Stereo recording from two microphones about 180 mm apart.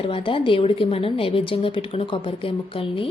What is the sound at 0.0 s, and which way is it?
A woman's voice, 30° left (ahead or behind).